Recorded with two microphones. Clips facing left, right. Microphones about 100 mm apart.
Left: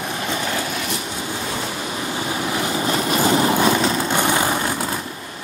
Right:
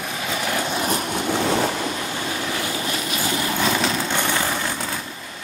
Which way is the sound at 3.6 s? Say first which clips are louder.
Left 4 dB; 10° left (ahead or behind).